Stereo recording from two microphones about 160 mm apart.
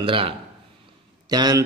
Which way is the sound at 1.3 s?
25° right (ahead or behind).